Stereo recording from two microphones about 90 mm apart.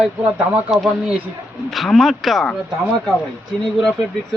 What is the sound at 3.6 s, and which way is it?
Speech, 5° left (ahead or behind).